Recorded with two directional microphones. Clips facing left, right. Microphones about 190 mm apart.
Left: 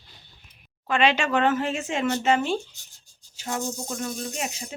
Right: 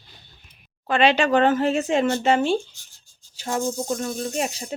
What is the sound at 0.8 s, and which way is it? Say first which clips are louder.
Speech: right 4 dB; 35° right (ahead or behind).